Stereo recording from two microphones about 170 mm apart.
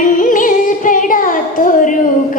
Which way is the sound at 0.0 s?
50° left (ahead or behind).